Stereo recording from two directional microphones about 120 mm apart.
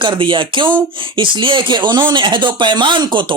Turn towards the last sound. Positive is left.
turn(degrees=-40)  # may be behind; listen again after turning